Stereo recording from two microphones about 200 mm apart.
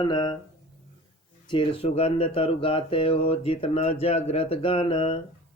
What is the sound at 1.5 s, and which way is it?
Speech, 25° left (ahead or behind).